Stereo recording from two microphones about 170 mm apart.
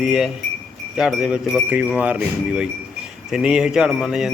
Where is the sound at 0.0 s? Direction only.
5° right (ahead or behind).